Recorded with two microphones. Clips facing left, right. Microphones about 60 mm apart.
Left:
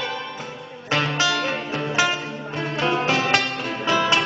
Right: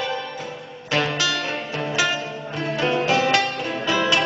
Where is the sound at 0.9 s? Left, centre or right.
Left.